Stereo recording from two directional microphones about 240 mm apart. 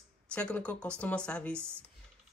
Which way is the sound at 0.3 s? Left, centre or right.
Centre.